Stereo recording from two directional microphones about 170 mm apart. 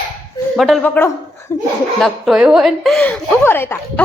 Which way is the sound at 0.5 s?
Centre (ahead or behind).